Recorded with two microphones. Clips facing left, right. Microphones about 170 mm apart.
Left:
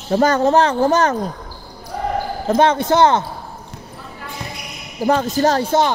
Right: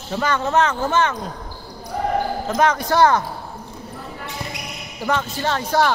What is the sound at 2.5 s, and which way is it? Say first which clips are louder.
Speech: left 5 dB; 30° left (ahead or behind).